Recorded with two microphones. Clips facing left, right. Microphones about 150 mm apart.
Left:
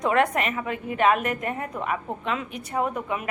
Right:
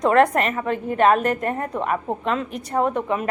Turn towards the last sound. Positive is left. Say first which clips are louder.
# right 5 dB
turn(degrees=-30)  # may be behind; listen again after turning